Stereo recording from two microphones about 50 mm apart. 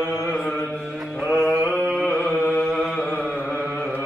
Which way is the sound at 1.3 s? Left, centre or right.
Centre.